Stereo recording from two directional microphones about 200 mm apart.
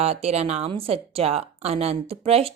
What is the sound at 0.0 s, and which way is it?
A woman's voice, 30° right (ahead or behind).